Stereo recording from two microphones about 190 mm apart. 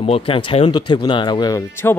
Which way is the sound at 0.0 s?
30° left (ahead or behind).